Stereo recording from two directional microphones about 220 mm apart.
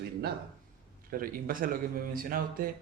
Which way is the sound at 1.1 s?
40° right (ahead or behind).